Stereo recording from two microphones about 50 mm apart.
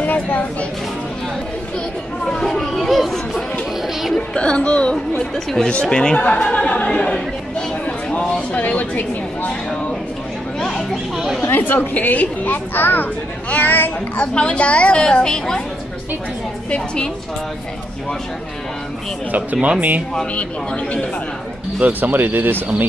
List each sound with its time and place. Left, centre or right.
0.0 s speech: left
2.2 s children playing: centre
4.1 s a child's voice: centre
5.2 s speech: centre
5.7 s a child's voice: left
6.1 s a child's voice: left
8.4 s speech: left
11.5 s speech: left
14.1 s a child's voice: left
16.7 s a child's voice: centre
19.5 s speech: right
20.3 s a child's voice: left
21.8 s speech: right